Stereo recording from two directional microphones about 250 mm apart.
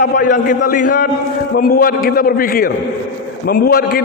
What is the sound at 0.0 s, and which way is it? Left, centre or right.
A man's voice, left.